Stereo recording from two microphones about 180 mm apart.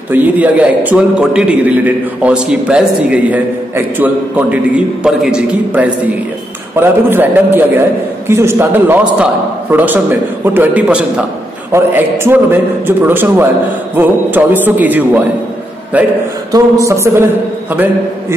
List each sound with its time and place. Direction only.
0.1 s a man's voice: 10° right (ahead or behind)